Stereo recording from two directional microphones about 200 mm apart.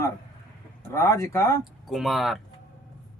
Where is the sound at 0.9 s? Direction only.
15° left (ahead or behind).